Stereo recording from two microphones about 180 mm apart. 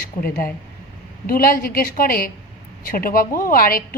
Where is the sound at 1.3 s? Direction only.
55° left (ahead or behind).